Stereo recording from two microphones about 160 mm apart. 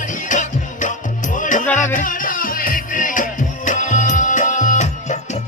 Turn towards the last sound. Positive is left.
turn(degrees=50)  # may be behind; listen again after turning